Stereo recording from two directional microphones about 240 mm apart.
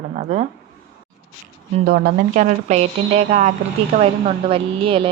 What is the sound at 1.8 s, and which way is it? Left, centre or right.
Speech, right.